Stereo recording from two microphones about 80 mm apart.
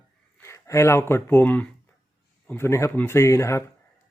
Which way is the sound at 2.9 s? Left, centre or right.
Left.